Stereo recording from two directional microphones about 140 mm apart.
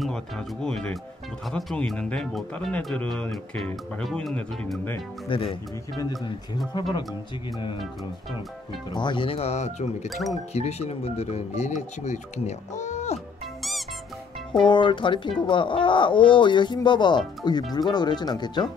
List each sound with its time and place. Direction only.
0.0 s speech: 5° left (ahead or behind)
5.3 s speech: 40° left (ahead or behind)
8.9 s speech: 35° left (ahead or behind); by 9.8 s 50° left (ahead or behind)
10.0 s speech: centre (ahead or behind)
10.5 s speech: 50° left (ahead or behind)
14.7 s speech: 35° left (ahead or behind)